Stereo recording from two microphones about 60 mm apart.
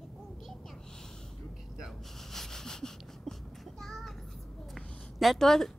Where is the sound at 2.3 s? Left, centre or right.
Centre.